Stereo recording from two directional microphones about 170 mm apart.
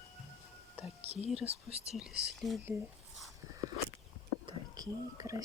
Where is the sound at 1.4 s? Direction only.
35° right (ahead or behind).